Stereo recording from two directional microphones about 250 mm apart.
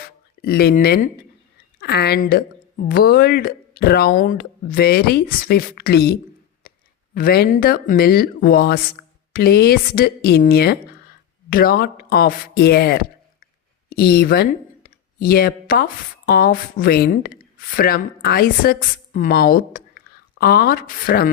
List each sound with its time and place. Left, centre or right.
0.4 s speech: left